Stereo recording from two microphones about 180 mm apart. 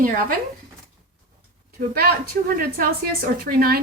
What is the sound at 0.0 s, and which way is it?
Speech, 50° right (ahead or behind).